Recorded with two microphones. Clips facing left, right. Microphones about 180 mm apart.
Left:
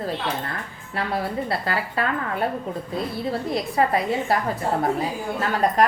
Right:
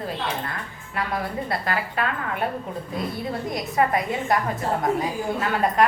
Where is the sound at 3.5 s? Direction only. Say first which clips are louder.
Even; 30° left (ahead or behind).